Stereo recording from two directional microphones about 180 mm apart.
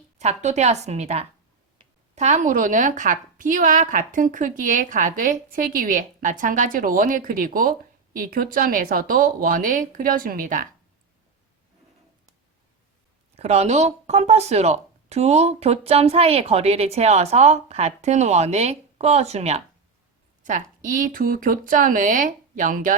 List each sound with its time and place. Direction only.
0.2 s a woman's voice: 40° right (ahead or behind)
13.3 s a woman's voice: 35° right (ahead or behind)